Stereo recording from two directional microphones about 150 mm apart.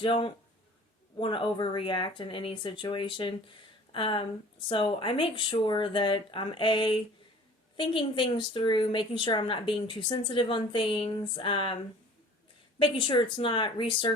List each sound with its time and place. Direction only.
0.0 s a woman's voice: 35° left (ahead or behind)
12.8 s a woman's voice: 35° left (ahead or behind)